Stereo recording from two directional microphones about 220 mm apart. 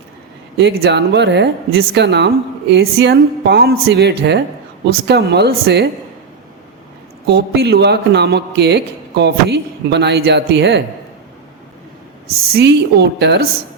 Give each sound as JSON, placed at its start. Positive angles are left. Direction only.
{"t": 0.5, "sound": "speech", "side_deg": -50}
{"t": 7.3, "sound": "speech", "side_deg": -45}
{"t": 12.5, "sound": "speech", "side_deg": -45}